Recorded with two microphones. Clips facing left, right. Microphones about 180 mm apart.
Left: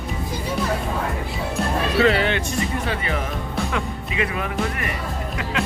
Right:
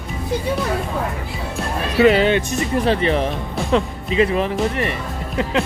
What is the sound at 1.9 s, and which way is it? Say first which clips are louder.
Speech: right 6 dB; 20° right (ahead or behind).